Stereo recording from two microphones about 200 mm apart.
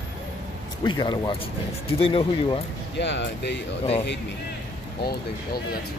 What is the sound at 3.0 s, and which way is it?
Speech, 65° left (ahead or behind).